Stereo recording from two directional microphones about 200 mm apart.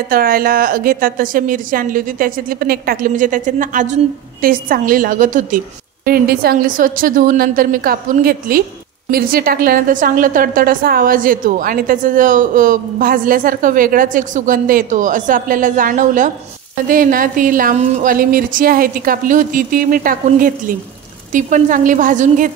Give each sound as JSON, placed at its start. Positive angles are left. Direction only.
{"t": 0.1, "sound": "a woman's voice", "side_deg": -45}